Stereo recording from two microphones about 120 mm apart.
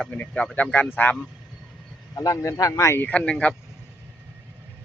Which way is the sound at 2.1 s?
30° left (ahead or behind).